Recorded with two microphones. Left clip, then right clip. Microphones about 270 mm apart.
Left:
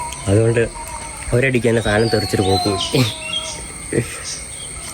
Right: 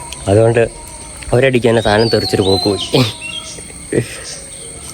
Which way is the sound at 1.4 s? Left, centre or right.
Centre.